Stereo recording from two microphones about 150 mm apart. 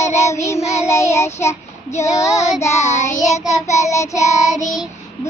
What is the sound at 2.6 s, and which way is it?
Child singing, 20° left (ahead or behind).